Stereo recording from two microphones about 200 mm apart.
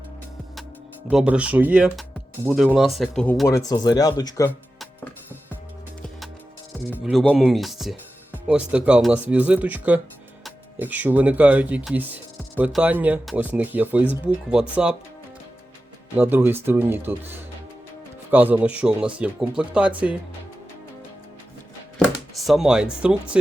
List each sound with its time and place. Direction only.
1.0 s speech: 5° right (ahead or behind); by 4.5 s 15° left (ahead or behind)
6.9 s speech: centre (ahead or behind)
16.1 s speech: 10° right (ahead or behind)
21.9 s speech: centre (ahead or behind)